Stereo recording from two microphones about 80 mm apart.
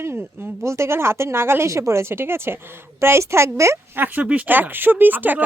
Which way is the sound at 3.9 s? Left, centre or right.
Right.